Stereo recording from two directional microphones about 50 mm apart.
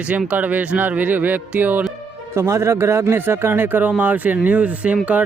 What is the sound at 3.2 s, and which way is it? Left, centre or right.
Speech, right.